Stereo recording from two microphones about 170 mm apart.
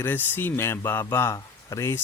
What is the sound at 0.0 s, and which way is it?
Speech, 10° left (ahead or behind).